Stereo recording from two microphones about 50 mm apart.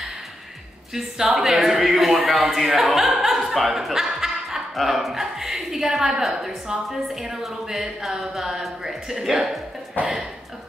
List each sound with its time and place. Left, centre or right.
0.9 s speech: centre
10.0 s speech: left